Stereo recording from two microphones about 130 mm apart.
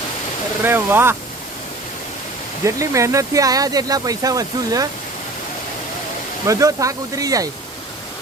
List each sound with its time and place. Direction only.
0.6 s speech: 15° right (ahead or behind)
2.6 s speech: 25° right (ahead or behind)
6.5 s speech: 25° right (ahead or behind)